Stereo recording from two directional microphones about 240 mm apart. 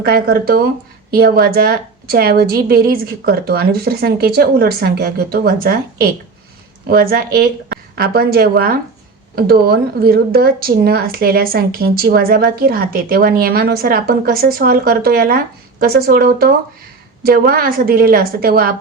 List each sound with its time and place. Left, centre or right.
0.0 s a woman's voice: right